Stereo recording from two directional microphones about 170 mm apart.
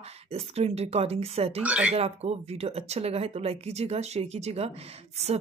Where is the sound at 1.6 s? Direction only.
5° right (ahead or behind).